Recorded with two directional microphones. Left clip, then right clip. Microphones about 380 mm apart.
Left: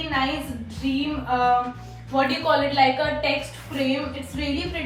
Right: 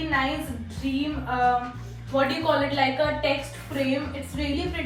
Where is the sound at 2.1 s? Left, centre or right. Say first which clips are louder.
Left 2 dB; centre.